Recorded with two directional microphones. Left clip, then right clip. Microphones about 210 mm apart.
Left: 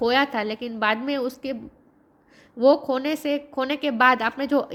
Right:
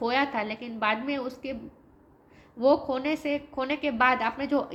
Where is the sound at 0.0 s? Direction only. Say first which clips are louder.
Left 5 dB; 50° left (ahead or behind).